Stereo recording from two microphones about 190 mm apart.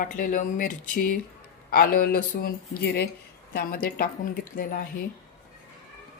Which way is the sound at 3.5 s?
50° left (ahead or behind).